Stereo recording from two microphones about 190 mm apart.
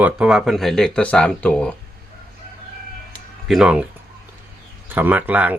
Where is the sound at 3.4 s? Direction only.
5° right (ahead or behind).